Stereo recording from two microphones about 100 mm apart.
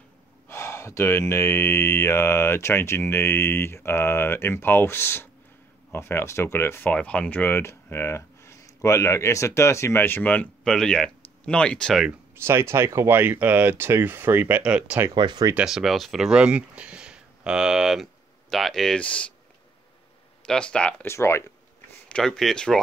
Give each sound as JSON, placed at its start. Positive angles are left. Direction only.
{"t": 0.5, "sound": "speech", "side_deg": 25}
{"t": 6.9, "sound": "speech", "side_deg": 10}
{"t": 12.4, "sound": "speech", "side_deg": -25}
{"t": 14.6, "sound": "speech", "side_deg": -10}
{"t": 15.0, "sound": "speech", "side_deg": -45}
{"t": 15.5, "sound": "speech", "side_deg": -5}
{"t": 20.4, "sound": "speech", "side_deg": 10}
{"t": 21.0, "sound": "speech", "side_deg": 25}
{"t": 22.1, "sound": "speech", "side_deg": 5}